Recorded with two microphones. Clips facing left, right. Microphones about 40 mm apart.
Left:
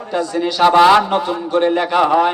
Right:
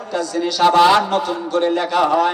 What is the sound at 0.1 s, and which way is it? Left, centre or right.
A man's voice, left.